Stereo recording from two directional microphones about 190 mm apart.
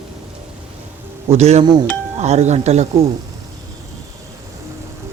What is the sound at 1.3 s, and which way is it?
Speech, 35° right (ahead or behind).